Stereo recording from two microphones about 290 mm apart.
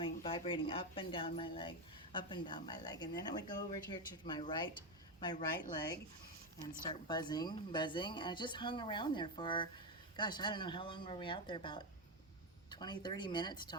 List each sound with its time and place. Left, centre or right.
0.0 s speech: centre
7.1 s speech: centre